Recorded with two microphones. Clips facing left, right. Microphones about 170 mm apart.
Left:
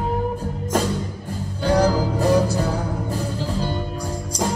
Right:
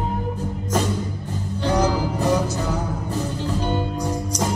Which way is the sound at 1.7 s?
35° left (ahead or behind).